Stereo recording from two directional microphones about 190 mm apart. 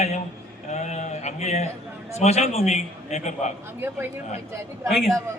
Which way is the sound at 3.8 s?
10° right (ahead or behind).